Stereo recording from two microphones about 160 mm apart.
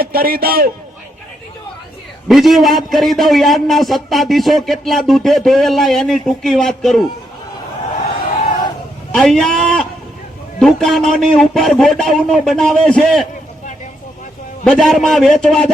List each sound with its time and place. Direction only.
0.0 s a man's voice: 65° right (ahead or behind)
2.2 s a man's voice: centre (ahead or behind)
9.1 s a man's voice: centre (ahead or behind)
14.6 s a man's voice: 5° left (ahead or behind)